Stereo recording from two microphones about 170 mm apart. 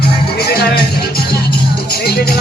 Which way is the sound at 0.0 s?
70° left (ahead or behind).